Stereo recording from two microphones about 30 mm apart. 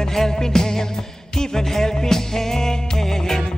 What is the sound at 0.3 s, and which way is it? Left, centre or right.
Music, centre.